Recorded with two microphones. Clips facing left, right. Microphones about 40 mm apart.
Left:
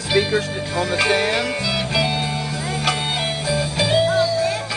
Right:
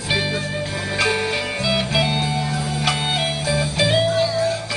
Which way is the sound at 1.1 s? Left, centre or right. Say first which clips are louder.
Left 3 dB; left.